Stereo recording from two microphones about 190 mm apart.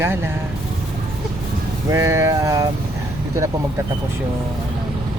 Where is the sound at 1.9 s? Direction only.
15° right (ahead or behind).